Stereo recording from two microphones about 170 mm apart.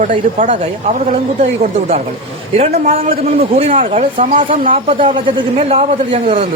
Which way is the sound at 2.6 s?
40° right (ahead or behind).